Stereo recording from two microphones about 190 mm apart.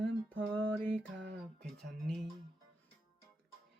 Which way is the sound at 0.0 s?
10° left (ahead or behind).